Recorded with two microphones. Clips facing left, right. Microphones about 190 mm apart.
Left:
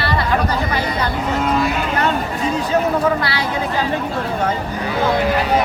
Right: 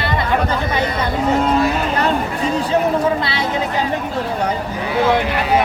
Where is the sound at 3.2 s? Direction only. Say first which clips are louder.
Even; 25° right (ahead or behind).